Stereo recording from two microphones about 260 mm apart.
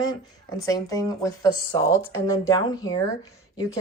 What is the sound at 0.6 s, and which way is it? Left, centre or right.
A woman's voice, centre.